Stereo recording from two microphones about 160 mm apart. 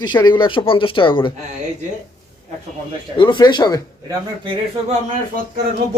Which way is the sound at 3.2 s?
30° left (ahead or behind).